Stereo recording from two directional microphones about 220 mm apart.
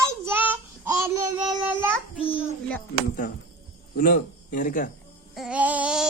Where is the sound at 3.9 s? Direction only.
40° left (ahead or behind).